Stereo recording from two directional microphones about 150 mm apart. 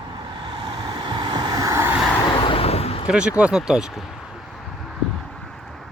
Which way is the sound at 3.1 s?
5° right (ahead or behind).